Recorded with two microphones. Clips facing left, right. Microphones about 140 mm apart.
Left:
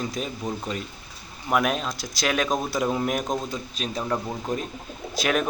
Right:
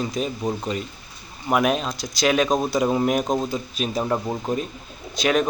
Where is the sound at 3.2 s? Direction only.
25° right (ahead or behind).